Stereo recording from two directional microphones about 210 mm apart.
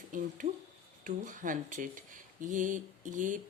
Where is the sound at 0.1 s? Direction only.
40° right (ahead or behind).